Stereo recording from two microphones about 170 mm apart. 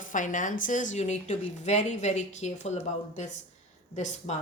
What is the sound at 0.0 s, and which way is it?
Speech, 50° left (ahead or behind).